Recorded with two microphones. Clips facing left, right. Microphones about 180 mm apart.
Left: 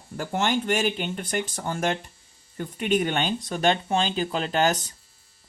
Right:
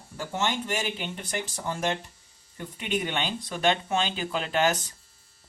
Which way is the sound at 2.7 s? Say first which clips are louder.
Left 6 dB; 50° left (ahead or behind).